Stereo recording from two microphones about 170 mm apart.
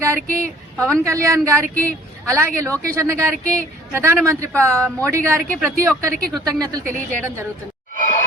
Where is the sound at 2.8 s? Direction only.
15° right (ahead or behind).